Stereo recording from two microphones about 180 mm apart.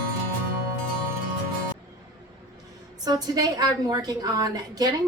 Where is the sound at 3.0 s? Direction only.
20° right (ahead or behind).